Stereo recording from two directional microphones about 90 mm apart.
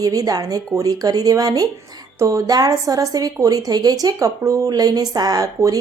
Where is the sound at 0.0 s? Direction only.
40° right (ahead or behind).